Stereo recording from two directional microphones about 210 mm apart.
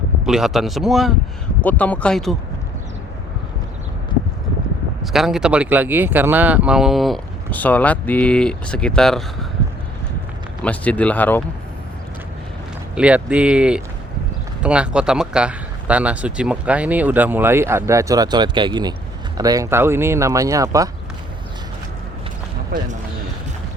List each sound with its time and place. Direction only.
0.3 s speech: centre (ahead or behind)
5.1 s speech: centre (ahead or behind)
10.6 s speech: 5° left (ahead or behind)
13.0 s speech: 5° right (ahead or behind)
22.7 s speech: 45° right (ahead or behind)